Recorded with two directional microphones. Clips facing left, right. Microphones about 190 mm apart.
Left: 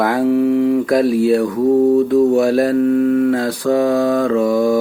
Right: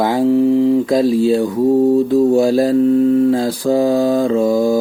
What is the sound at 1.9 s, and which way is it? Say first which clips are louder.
Speech: even; 30° right (ahead or behind).